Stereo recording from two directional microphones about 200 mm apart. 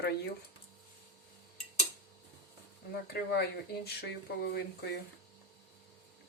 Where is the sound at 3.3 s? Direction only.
55° left (ahead or behind).